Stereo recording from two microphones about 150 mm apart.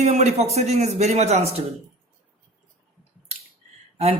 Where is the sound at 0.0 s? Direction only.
45° right (ahead or behind).